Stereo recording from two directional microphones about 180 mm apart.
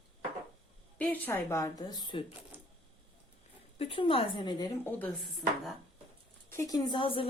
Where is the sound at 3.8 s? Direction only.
30° left (ahead or behind).